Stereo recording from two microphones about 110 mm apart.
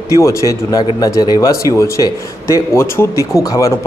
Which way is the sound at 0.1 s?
30° left (ahead or behind).